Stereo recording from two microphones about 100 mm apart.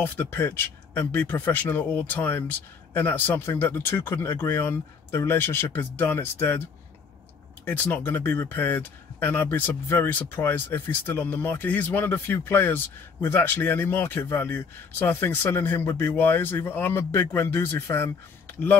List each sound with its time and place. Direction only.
0.0 s speech: 20° left (ahead or behind)
7.6 s speech: 15° left (ahead or behind)